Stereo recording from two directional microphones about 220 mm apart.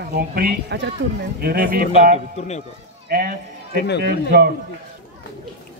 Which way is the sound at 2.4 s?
30° left (ahead or behind).